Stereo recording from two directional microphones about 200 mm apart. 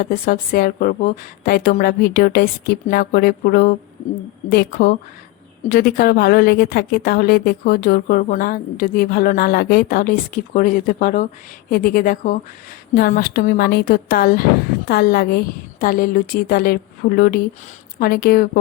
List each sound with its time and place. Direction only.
0.0 s a woman's voice: 45° left (ahead or behind)